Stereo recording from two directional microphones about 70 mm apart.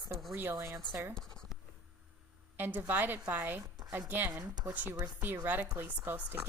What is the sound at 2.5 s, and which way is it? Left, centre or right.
A woman's voice, right.